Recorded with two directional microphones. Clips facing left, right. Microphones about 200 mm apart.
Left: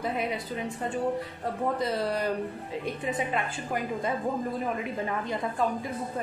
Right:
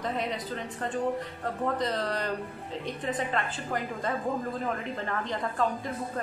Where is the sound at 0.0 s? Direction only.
10° left (ahead or behind).